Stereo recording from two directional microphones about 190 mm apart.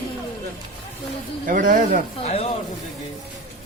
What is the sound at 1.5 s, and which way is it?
Speech, 45° right (ahead or behind).